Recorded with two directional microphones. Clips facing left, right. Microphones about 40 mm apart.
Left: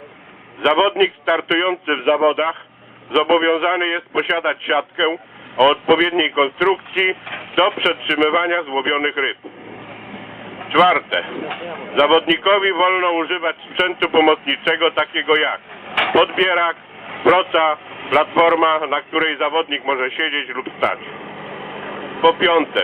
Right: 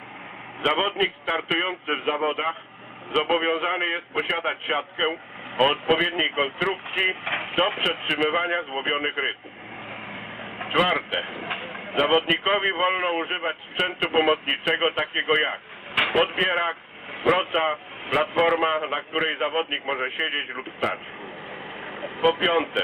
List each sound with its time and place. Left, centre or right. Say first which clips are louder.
0.6 s a man's voice: left 8 dB; left
3.3 s a man's voice: left 7 dB; left
6.9 s speech: left 6 dB; left
7.3 s speech: right 2 dB; centre
7.9 s a man's voice: left 7 dB; left
9.9 s vehicle: left 2 dB; centre
10.7 s a man's voice: left 9 dB; left
11.2 s speech: left 5 dB; centre
12.0 s a man's voice: left 7 dB; left
15.9 s vehicle: left 5 dB; centre
16.1 s a man's voice: left 9 dB; left
21.5 s vehicle: left 6 dB; centre
21.8 s vehicle: left 7 dB; left
22.1 s a man's voice: left 7 dB; left